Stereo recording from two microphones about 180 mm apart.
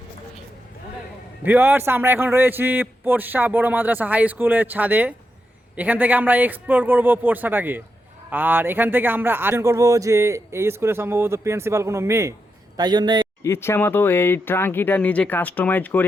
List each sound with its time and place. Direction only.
1.5 s a man's voice: 10° right (ahead or behind)
13.4 s speech: 15° left (ahead or behind)